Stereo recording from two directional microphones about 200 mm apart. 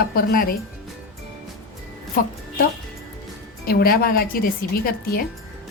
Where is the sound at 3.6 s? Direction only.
50° left (ahead or behind).